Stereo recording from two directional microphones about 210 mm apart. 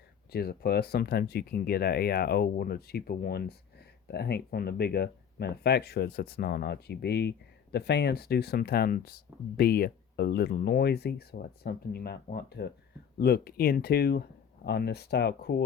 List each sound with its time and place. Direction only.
0.3 s speech: 50° left (ahead or behind)